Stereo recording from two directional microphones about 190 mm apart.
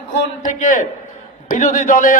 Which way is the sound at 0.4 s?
45° left (ahead or behind).